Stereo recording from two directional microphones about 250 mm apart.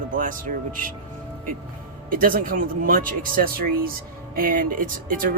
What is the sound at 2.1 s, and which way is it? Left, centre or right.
Speech, right.